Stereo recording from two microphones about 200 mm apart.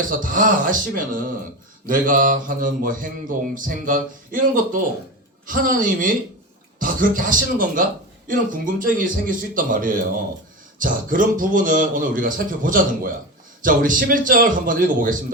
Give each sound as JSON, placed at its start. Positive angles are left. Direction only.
{"t": 0.2, "sound": "music", "side_deg": -40}
{"t": 5.5, "sound": "a woman's voice", "side_deg": -40}
{"t": 6.7, "sound": "music", "side_deg": -45}